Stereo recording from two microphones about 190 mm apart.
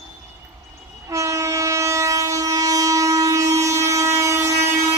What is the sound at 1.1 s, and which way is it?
Train, 15° right (ahead or behind).